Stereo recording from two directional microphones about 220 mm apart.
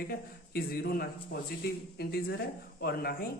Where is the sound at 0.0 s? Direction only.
45° left (ahead or behind).